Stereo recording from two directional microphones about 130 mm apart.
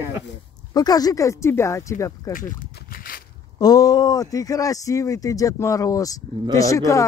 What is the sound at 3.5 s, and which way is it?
Speech, 30° left (ahead or behind).